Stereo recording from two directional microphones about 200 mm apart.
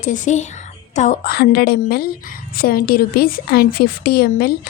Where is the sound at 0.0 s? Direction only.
40° left (ahead or behind).